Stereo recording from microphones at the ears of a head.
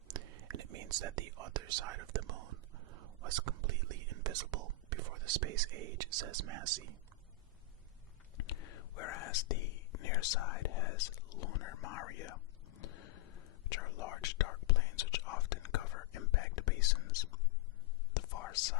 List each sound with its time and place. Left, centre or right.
0.1 s speech: right
8.4 s whispering: left